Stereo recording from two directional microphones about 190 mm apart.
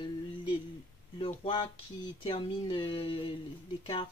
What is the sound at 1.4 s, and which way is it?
Speech, 25° left (ahead or behind).